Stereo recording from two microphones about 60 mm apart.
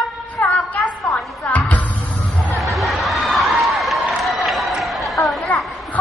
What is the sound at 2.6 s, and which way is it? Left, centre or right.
Crowd, centre.